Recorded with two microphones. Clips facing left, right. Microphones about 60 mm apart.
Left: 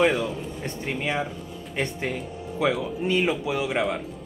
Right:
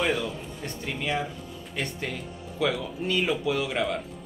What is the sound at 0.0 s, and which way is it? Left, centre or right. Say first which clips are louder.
Speech: left 5 dB; left.